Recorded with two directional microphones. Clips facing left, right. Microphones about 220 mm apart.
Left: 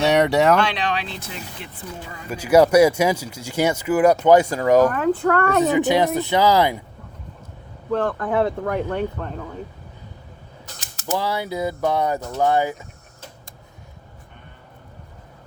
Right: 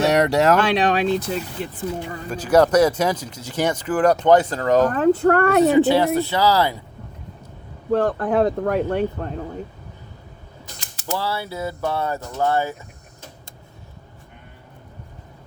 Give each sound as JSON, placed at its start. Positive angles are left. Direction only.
{"t": 0.0, "sound": "speech", "side_deg": 0}
{"t": 0.6, "sound": "speech", "side_deg": -45}
{"t": 2.3, "sound": "speech", "side_deg": 10}
{"t": 4.9, "sound": "speech", "side_deg": -40}
{"t": 5.7, "sound": "speech", "side_deg": 15}
{"t": 7.9, "sound": "speech", "side_deg": -40}
{"t": 11.0, "sound": "speech", "side_deg": 15}